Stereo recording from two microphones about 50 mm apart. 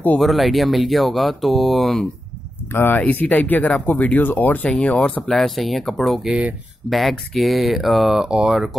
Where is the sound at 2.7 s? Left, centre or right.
Left.